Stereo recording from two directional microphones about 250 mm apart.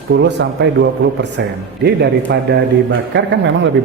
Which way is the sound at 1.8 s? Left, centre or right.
Right.